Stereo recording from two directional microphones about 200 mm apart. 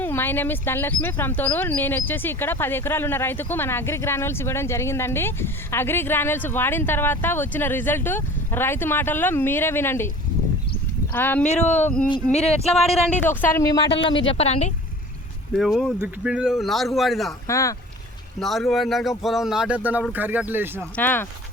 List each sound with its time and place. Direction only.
0.0 s speech: 10° left (ahead or behind)
11.1 s speech: 10° left (ahead or behind)
11.4 s speech: 35° left (ahead or behind)
11.7 s speech: 10° left (ahead or behind)
12.0 s speech: 30° left (ahead or behind)
12.9 s speech: 5° left (ahead or behind); by 14.7 s 30° left (ahead or behind)
15.5 s speech: centre (ahead or behind)
17.5 s speech: 15° left (ahead or behind)
18.3 s speech: centre (ahead or behind)
20.9 s speech: 10° left (ahead or behind)